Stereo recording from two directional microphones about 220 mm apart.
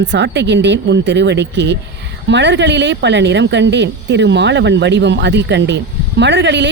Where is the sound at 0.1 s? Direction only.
55° right (ahead or behind).